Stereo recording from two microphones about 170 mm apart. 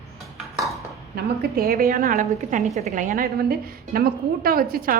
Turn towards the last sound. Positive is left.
turn(degrees=-60)  # may be behind; listen again after turning